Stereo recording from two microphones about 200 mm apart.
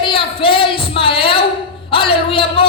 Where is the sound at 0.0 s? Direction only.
25° left (ahead or behind).